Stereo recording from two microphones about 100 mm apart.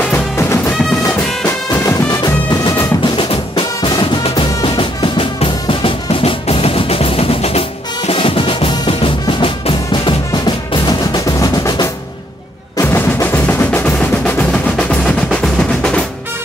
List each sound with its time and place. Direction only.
0.0 s music: 20° left (ahead or behind)
2.0 s music: 40° left (ahead or behind)
3.2 s music: 60° left (ahead or behind)
4.6 s drum: 60° left (ahead or behind); by 7.6 s 85° left
8.1 s music: 65° left (ahead or behind)
10.3 s music: 45° left (ahead or behind)
12.7 s percussion: 25° left (ahead or behind); by 16.0 s 10° left (ahead or behind)